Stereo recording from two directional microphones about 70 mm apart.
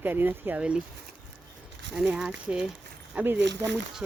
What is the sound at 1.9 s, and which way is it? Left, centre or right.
Speech, centre.